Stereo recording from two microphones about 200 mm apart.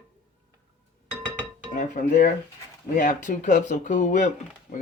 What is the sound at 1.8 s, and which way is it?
Speech, 45° left (ahead or behind).